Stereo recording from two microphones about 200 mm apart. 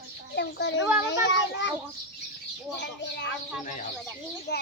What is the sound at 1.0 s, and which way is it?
Speech, 65° left (ahead or behind).